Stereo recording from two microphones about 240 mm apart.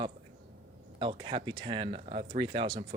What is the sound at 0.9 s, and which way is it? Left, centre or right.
Speech, right.